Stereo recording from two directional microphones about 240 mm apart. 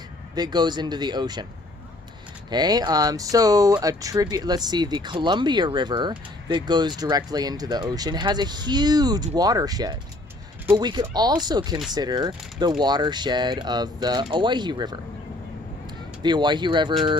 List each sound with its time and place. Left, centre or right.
0.3 s speech: centre
2.5 s speech: centre
16.2 s speech: centre